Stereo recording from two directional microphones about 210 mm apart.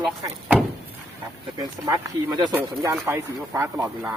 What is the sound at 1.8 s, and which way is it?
Speech, 20° right (ahead or behind).